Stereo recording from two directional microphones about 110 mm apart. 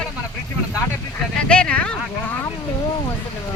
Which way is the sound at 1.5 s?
10° left (ahead or behind).